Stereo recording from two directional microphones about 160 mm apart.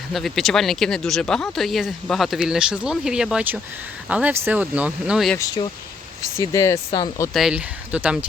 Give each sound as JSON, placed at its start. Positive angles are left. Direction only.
{"t": 0.1, "sound": "speech", "side_deg": 0}
{"t": 6.4, "sound": "speech", "side_deg": 20}
{"t": 7.3, "sound": "speech", "side_deg": -5}